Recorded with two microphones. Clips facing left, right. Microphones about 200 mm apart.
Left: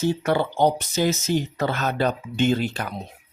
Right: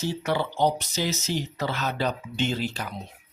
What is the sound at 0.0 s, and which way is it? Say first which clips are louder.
Speech: left 5 dB; 55° left (ahead or behind).